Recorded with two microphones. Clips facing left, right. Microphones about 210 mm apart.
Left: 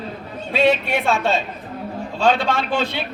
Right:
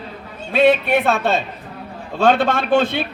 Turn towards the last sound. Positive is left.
turn(degrees=-55)  # may be behind; listen again after turning